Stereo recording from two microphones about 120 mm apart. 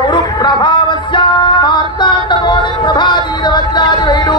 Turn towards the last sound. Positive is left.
turn(degrees=40)  # may be behind; listen again after turning